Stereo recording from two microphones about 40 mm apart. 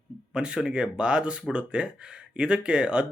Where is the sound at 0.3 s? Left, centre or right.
Right.